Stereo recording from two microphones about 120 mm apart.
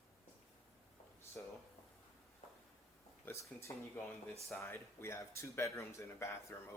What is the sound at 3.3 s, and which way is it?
Speech, 25° left (ahead or behind).